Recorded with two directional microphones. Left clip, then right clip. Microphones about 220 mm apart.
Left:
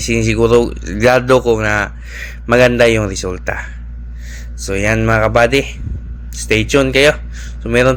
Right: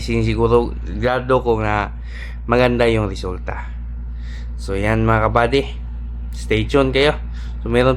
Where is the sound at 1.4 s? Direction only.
5° left (ahead or behind).